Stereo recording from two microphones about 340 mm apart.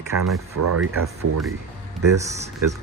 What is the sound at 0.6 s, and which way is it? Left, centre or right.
Speech, right.